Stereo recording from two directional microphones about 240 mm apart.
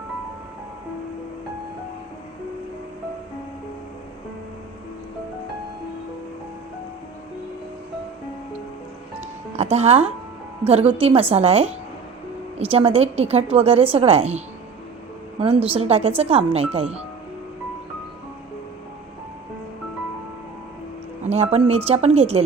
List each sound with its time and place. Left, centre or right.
9.6 s a woman's voice: right
21.2 s a woman's voice: right